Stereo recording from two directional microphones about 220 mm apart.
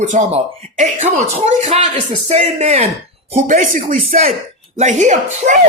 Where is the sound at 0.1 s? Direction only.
30° right (ahead or behind).